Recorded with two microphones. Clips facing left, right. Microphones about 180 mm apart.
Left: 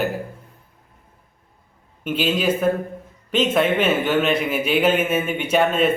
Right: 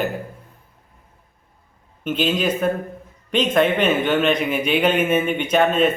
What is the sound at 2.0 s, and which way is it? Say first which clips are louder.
A man's voice: even; 5° left (ahead or behind).